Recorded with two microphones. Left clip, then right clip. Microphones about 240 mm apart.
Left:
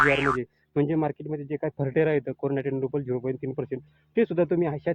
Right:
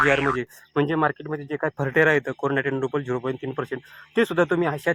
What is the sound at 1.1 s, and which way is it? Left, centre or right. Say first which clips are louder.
Speech: right 2 dB; right.